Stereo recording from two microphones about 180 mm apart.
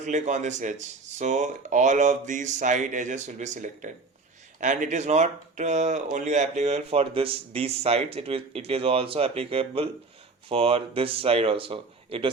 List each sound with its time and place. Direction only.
0.0 s speech: 40° right (ahead or behind)